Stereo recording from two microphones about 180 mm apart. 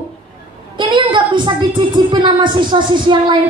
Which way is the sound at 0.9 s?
25° right (ahead or behind).